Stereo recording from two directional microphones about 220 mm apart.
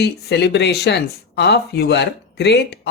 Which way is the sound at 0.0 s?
50° left (ahead or behind).